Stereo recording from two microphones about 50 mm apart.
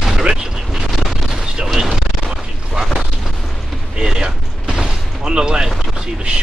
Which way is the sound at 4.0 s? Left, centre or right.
Centre.